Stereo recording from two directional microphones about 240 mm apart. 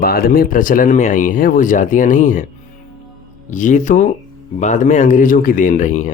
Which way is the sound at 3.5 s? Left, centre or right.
Left.